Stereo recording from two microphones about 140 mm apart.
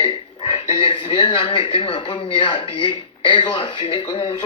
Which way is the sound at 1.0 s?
55° left (ahead or behind).